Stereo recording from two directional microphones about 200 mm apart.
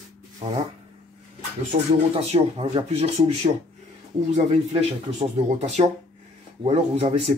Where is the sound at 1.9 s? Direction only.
30° right (ahead or behind).